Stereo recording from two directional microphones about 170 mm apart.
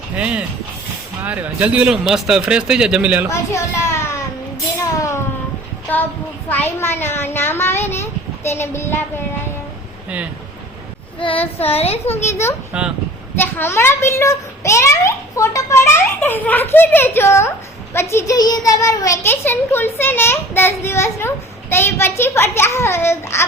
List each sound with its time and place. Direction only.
0.2 s a man's voice: 10° right (ahead or behind)
3.2 s a child's voice: 15° left (ahead or behind)
4.8 s a sound: 15° left (ahead or behind)
6.5 s a child's voice: 15° left (ahead or behind)
11.6 s a woman's voice: 35° left (ahead or behind)
12.3 s a child's voice: 15° left (ahead or behind)